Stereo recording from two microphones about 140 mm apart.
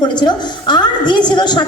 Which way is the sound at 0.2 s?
30° left (ahead or behind).